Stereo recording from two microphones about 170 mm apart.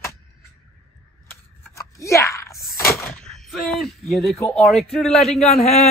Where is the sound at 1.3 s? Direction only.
20° left (ahead or behind).